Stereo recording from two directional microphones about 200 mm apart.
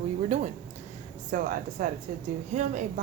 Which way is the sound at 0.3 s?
35° right (ahead or behind).